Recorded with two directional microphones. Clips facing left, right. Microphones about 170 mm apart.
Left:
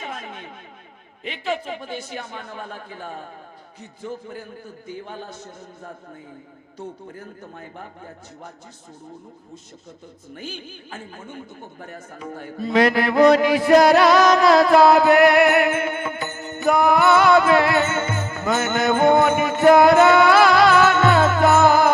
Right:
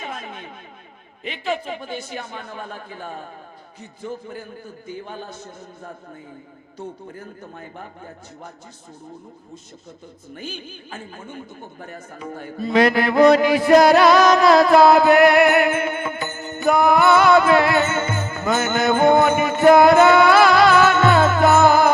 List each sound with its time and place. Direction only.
0.0 s a sound: 10° right (ahead or behind)
1.2 s speech: 10° right (ahead or behind)
7.1 s speech: 15° right (ahead or behind)
10.3 s a man's voice: 10° right (ahead or behind)